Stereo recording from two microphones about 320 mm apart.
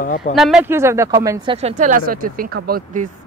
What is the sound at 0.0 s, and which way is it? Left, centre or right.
Speech, left.